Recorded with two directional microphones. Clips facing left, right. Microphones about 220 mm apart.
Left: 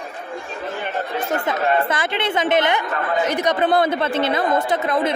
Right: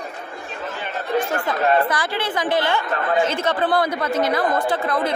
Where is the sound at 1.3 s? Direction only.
20° left (ahead or behind).